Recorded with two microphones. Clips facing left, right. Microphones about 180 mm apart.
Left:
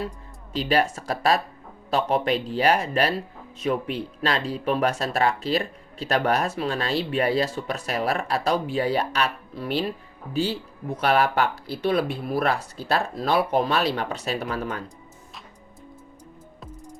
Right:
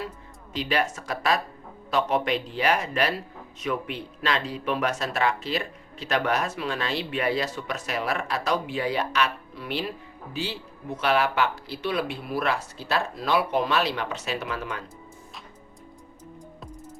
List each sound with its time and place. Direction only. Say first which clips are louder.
0.5 s speech: left 4 dB; 35° left (ahead or behind)
10.9 s speech: left 2 dB; 40° left (ahead or behind)